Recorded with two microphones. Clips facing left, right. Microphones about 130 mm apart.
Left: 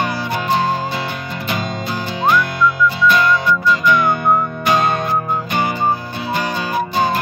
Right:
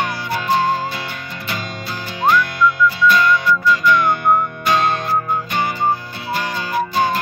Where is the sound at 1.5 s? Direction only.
20° left (ahead or behind).